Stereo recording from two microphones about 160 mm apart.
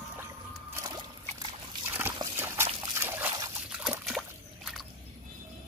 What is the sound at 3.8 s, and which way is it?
Trickle, 5° right (ahead or behind).